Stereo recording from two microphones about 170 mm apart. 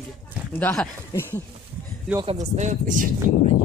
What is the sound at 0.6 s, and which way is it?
Speech, 15° left (ahead or behind).